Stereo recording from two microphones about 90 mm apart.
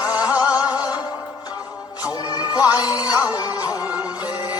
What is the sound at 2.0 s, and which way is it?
Music, 45° left (ahead or behind).